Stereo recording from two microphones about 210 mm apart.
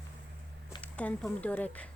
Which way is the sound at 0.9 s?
5° left (ahead or behind).